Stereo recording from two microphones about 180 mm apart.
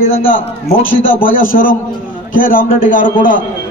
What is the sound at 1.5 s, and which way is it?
A man's voice, 50° left (ahead or behind).